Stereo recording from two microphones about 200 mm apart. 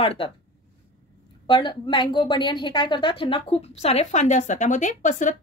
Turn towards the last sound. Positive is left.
turn(degrees=40)  # may be behind; listen again after turning